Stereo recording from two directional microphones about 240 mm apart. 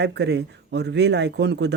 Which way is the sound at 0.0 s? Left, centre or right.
Right.